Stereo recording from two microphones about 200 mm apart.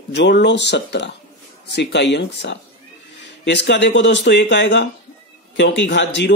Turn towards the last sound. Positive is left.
turn(degrees=60)  # may be behind; listen again after turning